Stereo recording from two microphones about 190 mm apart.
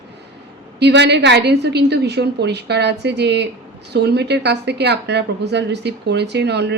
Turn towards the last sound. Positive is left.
turn(degrees=-60)  # may be behind; listen again after turning